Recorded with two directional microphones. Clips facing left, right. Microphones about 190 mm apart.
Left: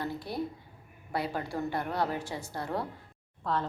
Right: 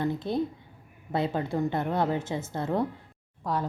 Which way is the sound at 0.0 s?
20° right (ahead or behind).